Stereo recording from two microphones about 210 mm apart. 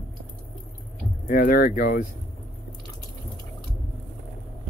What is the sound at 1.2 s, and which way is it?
Speech, 40° left (ahead or behind).